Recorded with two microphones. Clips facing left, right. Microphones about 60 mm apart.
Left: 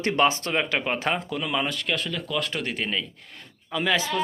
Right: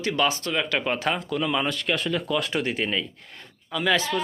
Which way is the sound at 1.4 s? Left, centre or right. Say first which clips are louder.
Right 2 dB; centre.